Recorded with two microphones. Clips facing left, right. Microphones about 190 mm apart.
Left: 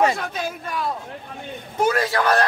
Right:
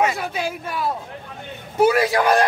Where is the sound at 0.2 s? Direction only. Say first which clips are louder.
Right 2 dB; 10° right (ahead or behind).